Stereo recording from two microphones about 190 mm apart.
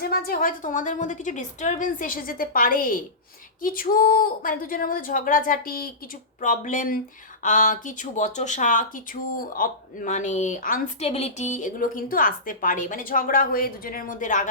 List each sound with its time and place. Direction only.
0.0 s speech: 50° left (ahead or behind)
11.0 s speech: 35° left (ahead or behind)